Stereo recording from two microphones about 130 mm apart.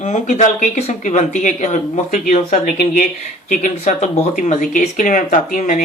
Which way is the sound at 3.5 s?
70° left (ahead or behind).